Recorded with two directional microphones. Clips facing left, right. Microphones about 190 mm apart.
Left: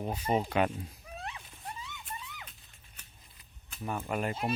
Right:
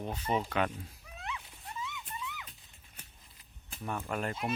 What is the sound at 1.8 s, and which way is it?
Music, 35° left (ahead or behind).